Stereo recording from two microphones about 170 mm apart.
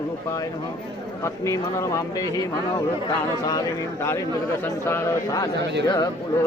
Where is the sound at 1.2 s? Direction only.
20° left (ahead or behind).